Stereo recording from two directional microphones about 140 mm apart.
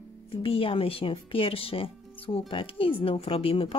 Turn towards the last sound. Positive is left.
turn(degrees=40)  # may be behind; listen again after turning